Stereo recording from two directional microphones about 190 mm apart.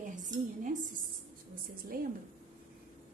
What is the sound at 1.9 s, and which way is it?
Speech, 50° right (ahead or behind).